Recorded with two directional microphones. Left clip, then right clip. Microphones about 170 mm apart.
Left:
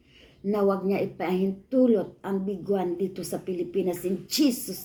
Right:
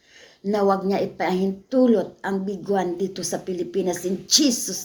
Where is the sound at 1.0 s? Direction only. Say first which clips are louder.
Right 5 dB; 35° right (ahead or behind).